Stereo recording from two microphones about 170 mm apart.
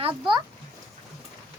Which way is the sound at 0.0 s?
30° right (ahead or behind).